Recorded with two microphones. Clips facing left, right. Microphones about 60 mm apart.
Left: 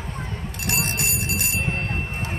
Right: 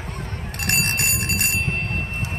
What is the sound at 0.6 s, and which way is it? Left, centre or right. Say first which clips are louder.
Bicycle bell: right 3 dB; right.